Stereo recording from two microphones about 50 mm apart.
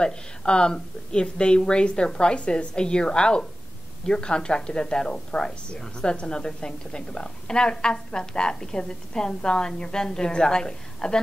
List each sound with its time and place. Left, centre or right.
0.0 s speech: centre